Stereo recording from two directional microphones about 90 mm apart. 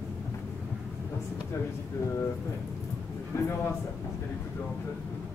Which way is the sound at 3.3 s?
35° left (ahead or behind).